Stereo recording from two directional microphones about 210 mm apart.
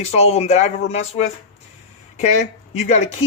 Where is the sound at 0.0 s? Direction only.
30° left (ahead or behind).